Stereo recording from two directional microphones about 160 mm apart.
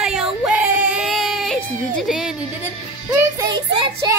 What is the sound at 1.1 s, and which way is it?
Baby cry, centre (ahead or behind).